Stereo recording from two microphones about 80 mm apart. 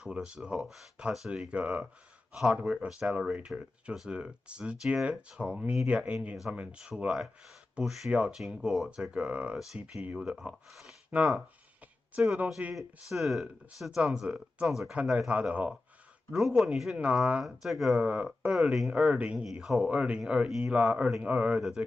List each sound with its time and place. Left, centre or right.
0.0 s speech: centre
2.3 s speech: centre
2.6 s speech: centre
12.7 s speech: centre
16.3 s speech: centre
17.9 s speech: centre
18.9 s speech: centre
21.5 s speech: centre